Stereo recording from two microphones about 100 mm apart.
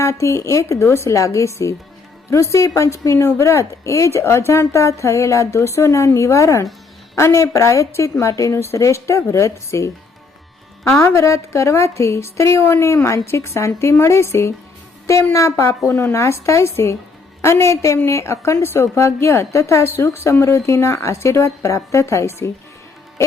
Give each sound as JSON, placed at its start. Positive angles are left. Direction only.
{"t": 0.0, "sound": "a woman's voice", "side_deg": 30}
{"t": 10.9, "sound": "a woman's voice", "side_deg": 25}